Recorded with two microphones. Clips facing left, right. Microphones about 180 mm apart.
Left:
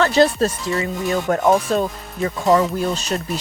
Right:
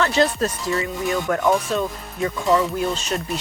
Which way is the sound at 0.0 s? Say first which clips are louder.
Left 4 dB; 35° left (ahead or behind).